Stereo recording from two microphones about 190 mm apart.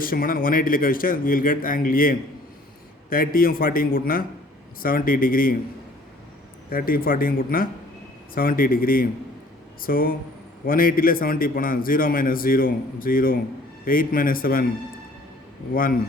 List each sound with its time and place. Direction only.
0.0 s a man's voice: 50° left (ahead or behind)
6.7 s a man's voice: 50° left (ahead or behind)